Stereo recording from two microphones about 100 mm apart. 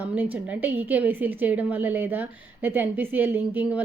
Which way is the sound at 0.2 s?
20° right (ahead or behind).